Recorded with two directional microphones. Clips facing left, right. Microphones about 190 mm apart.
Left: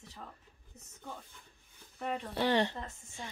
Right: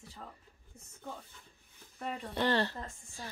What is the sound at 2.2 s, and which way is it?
Speech, centre (ahead or behind).